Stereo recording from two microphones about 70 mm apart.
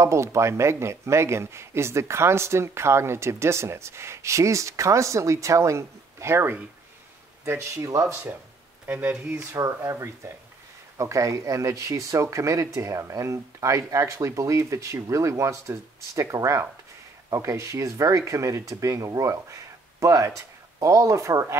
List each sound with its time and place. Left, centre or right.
0.0 s speech: right
8.8 s speech: right
9.3 s speech: right